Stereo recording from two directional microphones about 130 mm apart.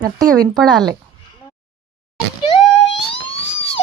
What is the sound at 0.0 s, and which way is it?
Speech, 30° right (ahead or behind).